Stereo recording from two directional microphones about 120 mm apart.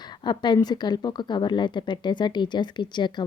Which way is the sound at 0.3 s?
40° left (ahead or behind).